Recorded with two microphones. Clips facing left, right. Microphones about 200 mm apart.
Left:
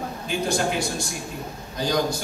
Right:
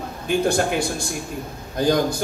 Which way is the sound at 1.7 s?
55° right (ahead or behind).